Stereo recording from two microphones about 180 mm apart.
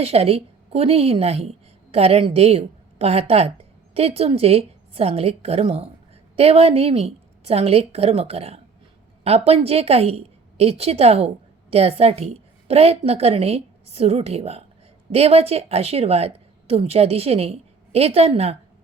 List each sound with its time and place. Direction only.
0.0 s a woman's voice: 35° right (ahead or behind)